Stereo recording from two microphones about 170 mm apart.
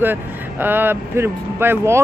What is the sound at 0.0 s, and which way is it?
Speech, 10° right (ahead or behind).